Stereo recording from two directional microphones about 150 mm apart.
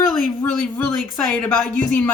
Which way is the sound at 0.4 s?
10° left (ahead or behind).